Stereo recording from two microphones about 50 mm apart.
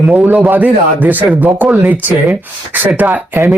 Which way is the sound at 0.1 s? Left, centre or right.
Right.